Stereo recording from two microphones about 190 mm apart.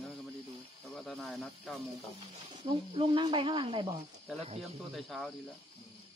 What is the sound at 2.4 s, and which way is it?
Speech, 30° right (ahead or behind).